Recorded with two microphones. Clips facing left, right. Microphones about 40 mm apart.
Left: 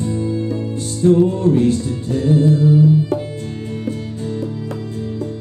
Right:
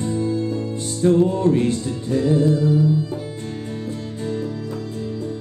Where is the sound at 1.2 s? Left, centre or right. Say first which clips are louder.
Left 3 dB; centre.